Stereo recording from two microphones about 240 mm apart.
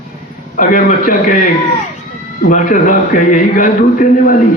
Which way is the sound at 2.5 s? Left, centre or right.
Left.